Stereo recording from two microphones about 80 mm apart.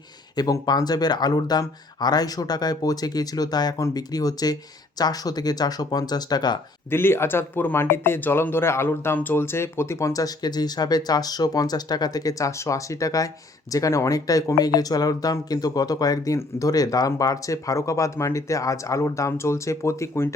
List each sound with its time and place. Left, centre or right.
0.3 s speech: left
6.9 s speech: left